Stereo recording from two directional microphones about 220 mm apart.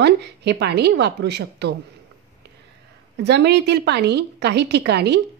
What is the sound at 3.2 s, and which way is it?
Speech, 50° right (ahead or behind).